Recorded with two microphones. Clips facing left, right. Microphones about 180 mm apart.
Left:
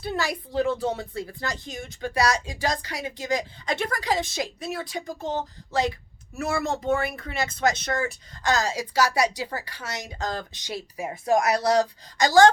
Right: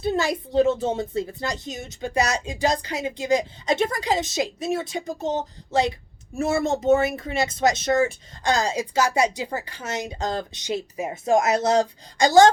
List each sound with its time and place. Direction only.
0.0 s speech: 25° right (ahead or behind)